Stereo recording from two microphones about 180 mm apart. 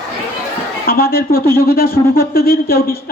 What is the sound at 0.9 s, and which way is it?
Speech, 55° left (ahead or behind).